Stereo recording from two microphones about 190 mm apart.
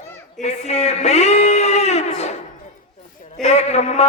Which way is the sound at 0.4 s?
35° left (ahead or behind).